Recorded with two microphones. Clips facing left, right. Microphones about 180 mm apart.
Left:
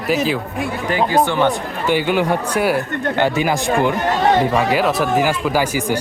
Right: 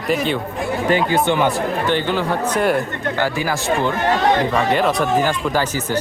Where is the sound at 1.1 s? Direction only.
20° right (ahead or behind).